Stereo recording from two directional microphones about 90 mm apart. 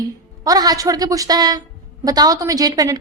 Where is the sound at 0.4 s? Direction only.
45° right (ahead or behind).